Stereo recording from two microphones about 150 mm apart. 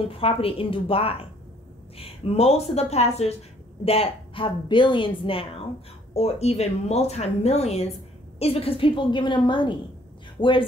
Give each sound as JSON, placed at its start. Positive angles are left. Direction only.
{"t": 0.2, "sound": "a woman's voice", "side_deg": 40}